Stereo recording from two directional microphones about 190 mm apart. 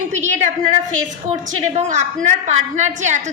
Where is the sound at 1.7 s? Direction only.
40° right (ahead or behind).